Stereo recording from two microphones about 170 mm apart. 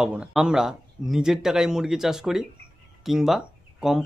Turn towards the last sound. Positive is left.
turn(degrees=0)  # may be behind; listen again after turning